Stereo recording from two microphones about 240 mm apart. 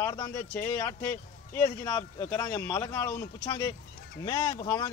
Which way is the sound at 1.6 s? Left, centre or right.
Centre.